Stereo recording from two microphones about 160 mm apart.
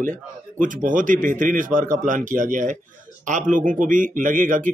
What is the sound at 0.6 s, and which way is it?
Speech, 55° right (ahead or behind).